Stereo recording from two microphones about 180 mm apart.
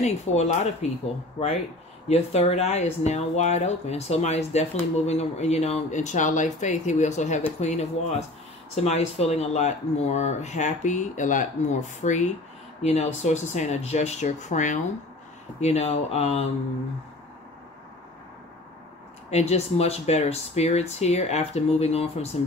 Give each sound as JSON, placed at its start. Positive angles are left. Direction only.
{"t": 0.0, "sound": "speech", "side_deg": 40}
{"t": 2.0, "sound": "speech", "side_deg": 35}
{"t": 19.3, "sound": "speech", "side_deg": 35}